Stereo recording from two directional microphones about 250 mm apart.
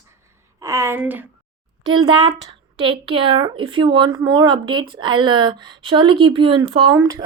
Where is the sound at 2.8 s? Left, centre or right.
Right.